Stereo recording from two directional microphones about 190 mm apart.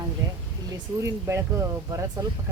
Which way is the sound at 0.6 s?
15° right (ahead or behind).